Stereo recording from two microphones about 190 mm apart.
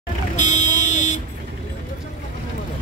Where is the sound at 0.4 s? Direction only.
40° left (ahead or behind).